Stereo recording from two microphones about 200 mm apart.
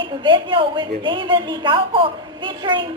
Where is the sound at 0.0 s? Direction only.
25° right (ahead or behind).